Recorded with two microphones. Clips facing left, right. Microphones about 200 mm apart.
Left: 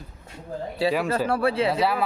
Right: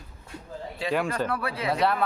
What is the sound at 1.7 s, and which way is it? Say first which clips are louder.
Speech: left 1 dB; 5° left (ahead or behind).